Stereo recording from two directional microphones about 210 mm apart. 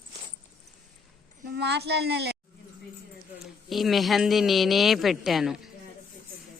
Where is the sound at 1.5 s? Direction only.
50° right (ahead or behind).